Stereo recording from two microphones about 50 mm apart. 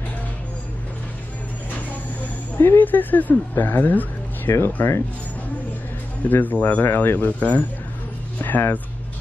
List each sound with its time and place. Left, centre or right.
2.5 s speech: left
4.5 s speech: left
6.2 s speech: left